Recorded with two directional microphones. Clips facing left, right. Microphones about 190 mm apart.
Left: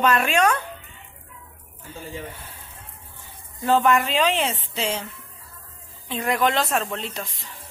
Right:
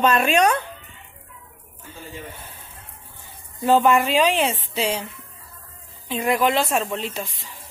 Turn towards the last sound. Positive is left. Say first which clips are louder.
# right 2 dB
turn(degrees=-5)  # may be behind; listen again after turning